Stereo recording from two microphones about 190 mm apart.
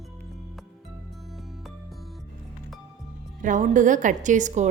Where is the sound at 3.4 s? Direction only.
40° right (ahead or behind).